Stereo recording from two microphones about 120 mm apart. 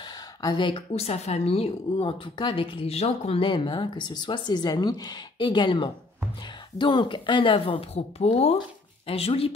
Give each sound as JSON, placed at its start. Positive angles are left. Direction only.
{"t": 0.4, "sound": "a woman's voice", "side_deg": 40}